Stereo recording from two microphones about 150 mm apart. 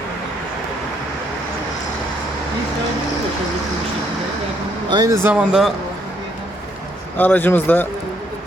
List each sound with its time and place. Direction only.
4.9 s speech: 25° right (ahead or behind)
5.2 s speech: 10° right (ahead or behind)
7.2 s speech: 15° left (ahead or behind)